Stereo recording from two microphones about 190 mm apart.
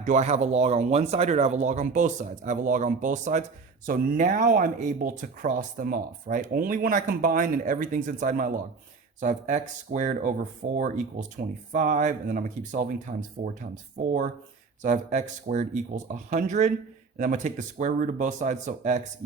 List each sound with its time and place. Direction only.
0.0 s speech: 40° right (ahead or behind)
14.8 s speech: 40° right (ahead or behind)